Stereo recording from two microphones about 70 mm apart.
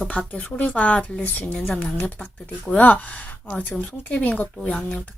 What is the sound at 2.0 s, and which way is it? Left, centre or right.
Speech, left.